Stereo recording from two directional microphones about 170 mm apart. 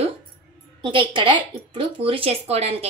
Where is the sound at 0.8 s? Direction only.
30° right (ahead or behind).